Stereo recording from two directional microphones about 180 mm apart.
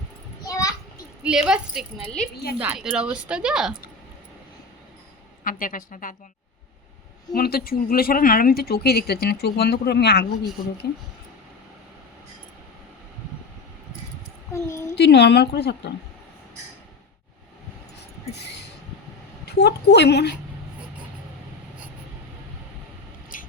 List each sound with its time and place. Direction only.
0.4 s children playing: 20° left (ahead or behind)
1.2 s speech: 5° right (ahead or behind)
2.3 s speech: 60° left (ahead or behind)
2.6 s speech: 5° right (ahead or behind)
5.4 s a woman's voice: 50° left (ahead or behind)
7.3 s speech: 55° left (ahead or behind)
14.5 s a woman's voice: 15° left (ahead or behind)
14.9 s a woman's voice: 70° left (ahead or behind)
19.5 s a woman's voice: 65° left (ahead or behind)
23.3 s scissors: 45° left (ahead or behind)